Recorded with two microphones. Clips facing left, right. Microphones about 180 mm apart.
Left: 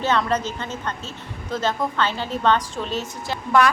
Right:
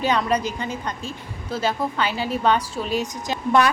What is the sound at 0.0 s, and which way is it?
A woman's voice, 15° right (ahead or behind).